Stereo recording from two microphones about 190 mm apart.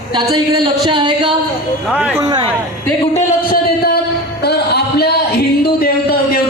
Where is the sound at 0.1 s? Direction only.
25° right (ahead or behind).